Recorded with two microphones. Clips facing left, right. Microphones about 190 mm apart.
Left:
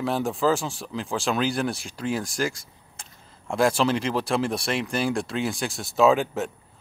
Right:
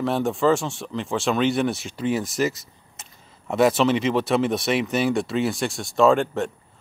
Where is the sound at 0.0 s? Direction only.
Centre (ahead or behind).